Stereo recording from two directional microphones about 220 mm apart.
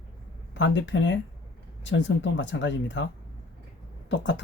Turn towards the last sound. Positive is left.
turn(degrees=55)  # may be behind; listen again after turning